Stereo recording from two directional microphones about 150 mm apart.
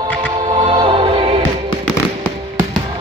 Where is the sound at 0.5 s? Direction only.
35° right (ahead or behind).